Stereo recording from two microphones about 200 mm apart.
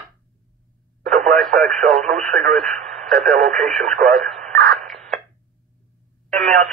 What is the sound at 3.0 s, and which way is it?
Speech, 40° right (ahead or behind).